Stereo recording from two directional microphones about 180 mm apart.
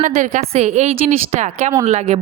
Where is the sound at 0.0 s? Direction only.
45° right (ahead or behind).